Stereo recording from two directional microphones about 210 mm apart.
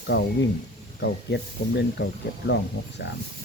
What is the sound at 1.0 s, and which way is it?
Speech, 55° left (ahead or behind).